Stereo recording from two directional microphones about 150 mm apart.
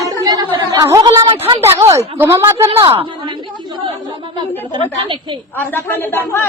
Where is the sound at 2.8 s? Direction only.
35° right (ahead or behind).